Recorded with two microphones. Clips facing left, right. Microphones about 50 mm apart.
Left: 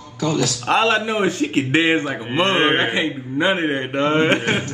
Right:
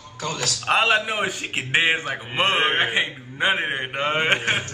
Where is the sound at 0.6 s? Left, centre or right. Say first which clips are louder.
Left 1 dB; centre.